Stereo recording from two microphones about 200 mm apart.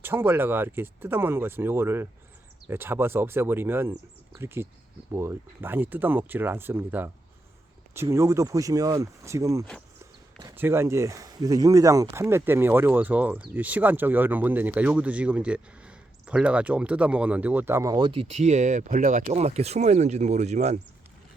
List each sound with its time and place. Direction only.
0.0 s speech: 10° right (ahead or behind); by 20.7 s 35° right (ahead or behind)